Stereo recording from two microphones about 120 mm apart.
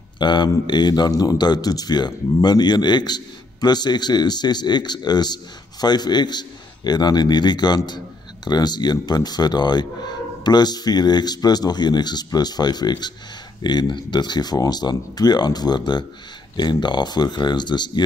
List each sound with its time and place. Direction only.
0.2 s speech: 40° left (ahead or behind)